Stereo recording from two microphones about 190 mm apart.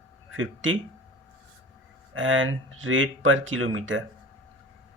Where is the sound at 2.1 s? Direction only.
90° right.